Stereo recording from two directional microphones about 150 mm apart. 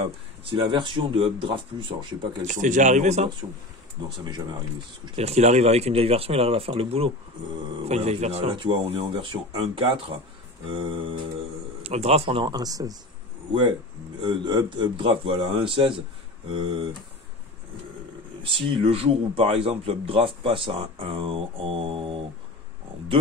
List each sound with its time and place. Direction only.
0.0 s speech: 35° right (ahead or behind)
2.4 s speech: 55° right (ahead or behind)
5.0 s speech: 45° right (ahead or behind)
18.4 s speech: 40° right (ahead or behind)